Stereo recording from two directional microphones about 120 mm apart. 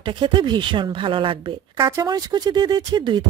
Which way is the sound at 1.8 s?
30° right (ahead or behind).